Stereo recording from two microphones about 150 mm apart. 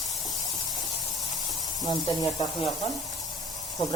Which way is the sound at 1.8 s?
25° left (ahead or behind).